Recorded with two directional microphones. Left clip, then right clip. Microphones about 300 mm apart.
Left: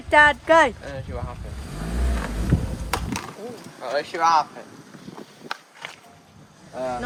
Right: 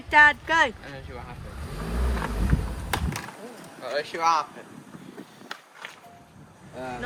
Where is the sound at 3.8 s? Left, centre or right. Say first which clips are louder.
Left 4 dB; left.